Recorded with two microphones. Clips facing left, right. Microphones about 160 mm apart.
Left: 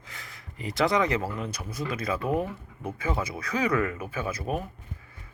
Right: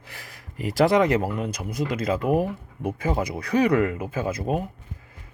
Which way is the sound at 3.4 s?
30° right (ahead or behind).